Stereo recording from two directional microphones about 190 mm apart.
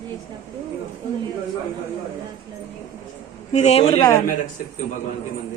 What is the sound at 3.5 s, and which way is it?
Speech, 35° left (ahead or behind).